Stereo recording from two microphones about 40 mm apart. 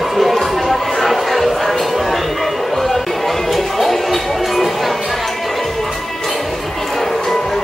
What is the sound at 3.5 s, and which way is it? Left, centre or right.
Music, centre.